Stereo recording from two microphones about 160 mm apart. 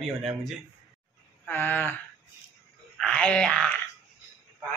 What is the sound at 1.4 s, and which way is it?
Speech, 10° left (ahead or behind).